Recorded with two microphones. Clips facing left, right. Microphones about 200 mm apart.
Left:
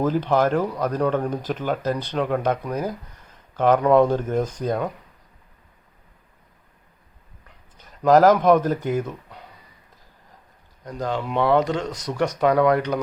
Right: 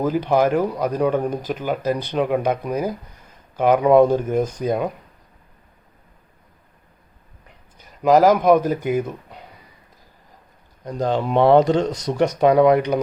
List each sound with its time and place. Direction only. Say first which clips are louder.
0.0 s speech: right 2 dB; 10° right (ahead or behind)
7.8 s speech: right 1 dB; 5° right (ahead or behind)
10.8 s speech: right 5 dB; 30° right (ahead or behind)